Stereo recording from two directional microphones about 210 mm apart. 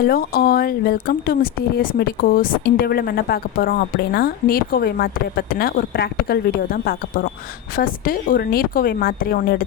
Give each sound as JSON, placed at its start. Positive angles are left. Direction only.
{"t": 0.0, "sound": "speech", "side_deg": 45}
{"t": 7.8, "sound": "speech", "side_deg": 45}